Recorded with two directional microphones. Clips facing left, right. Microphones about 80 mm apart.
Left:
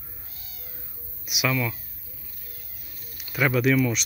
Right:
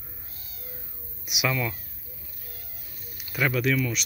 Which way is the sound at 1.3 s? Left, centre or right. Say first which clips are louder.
Left 1 dB; centre.